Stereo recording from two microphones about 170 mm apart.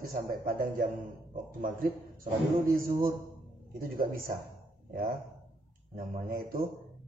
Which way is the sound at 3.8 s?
55° right (ahead or behind).